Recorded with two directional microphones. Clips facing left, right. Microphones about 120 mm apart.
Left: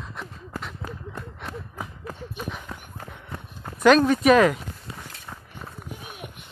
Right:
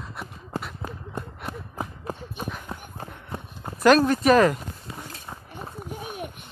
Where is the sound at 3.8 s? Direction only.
Centre (ahead or behind).